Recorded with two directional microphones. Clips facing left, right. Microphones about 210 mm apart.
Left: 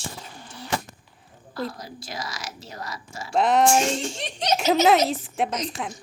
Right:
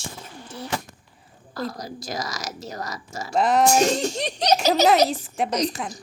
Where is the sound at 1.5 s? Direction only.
40° right (ahead or behind).